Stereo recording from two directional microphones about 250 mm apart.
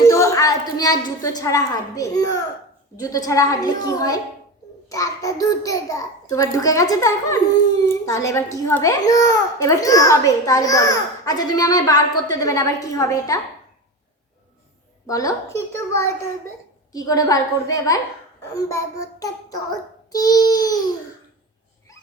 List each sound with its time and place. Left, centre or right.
0.1 s a child's voice: centre
15.0 s a child's voice: centre